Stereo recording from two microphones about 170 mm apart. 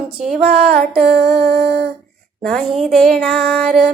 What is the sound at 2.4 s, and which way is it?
Speech, centre (ahead or behind).